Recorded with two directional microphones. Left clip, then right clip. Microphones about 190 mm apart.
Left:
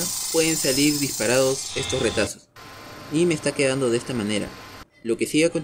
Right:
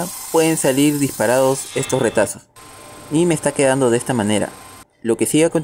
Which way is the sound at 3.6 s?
30° right (ahead or behind).